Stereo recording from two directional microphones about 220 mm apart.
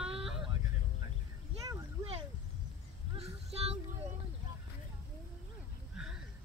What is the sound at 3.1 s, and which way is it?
Child singing, 30° right (ahead or behind).